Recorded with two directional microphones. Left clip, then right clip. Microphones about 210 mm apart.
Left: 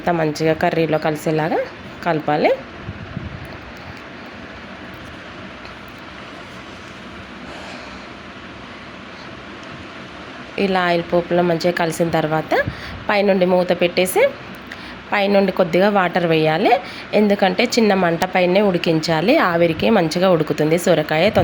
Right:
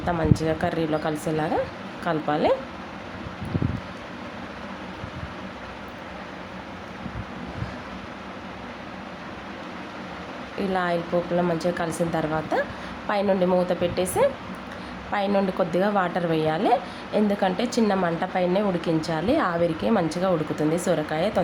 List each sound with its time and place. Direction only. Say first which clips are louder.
0.0 s a woman's voice: left 7 dB; 20° left (ahead or behind)
10.6 s a woman's voice: left 8 dB; 20° left (ahead or behind)